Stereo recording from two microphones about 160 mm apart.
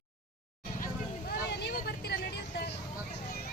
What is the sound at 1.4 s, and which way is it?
Vehicle, 90° left.